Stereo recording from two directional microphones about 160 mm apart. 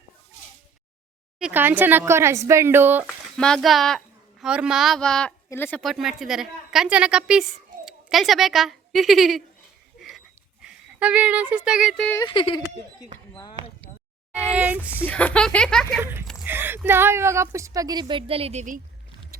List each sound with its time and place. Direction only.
1.4 s a woman's voice: 10° right (ahead or behind)
3.1 s a woman's voice: 5° left (ahead or behind)
5.8 s a woman's voice: centre (ahead or behind)
10.0 s a sound: centre (ahead or behind)
11.5 s speech: 5° right (ahead or behind)
12.2 s speech: 30° left (ahead or behind)
14.4 s a woman's voice: 10° right (ahead or behind)
15.0 s speech: 10° left (ahead or behind)
16.0 s a woman's voice: 15° right (ahead or behind); by 18.6 s 35° right (ahead or behind)
19.3 s music: 70° right (ahead or behind)